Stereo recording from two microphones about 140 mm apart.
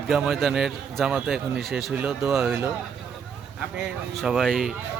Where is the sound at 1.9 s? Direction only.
15° right (ahead or behind).